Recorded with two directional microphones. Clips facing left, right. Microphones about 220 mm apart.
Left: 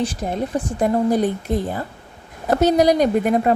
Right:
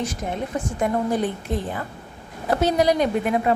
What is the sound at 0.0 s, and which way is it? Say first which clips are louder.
A woman's voice: left 4 dB; 30° left (ahead or behind).